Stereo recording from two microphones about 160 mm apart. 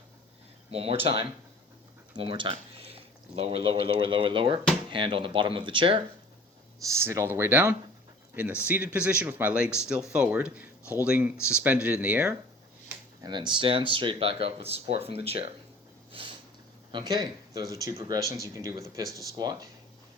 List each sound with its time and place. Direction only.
0.7 s speech: 40° right (ahead or behind)
6.8 s speech: 20° right (ahead or behind)
13.2 s speech: 30° right (ahead or behind)
16.9 s speech: 25° right (ahead or behind)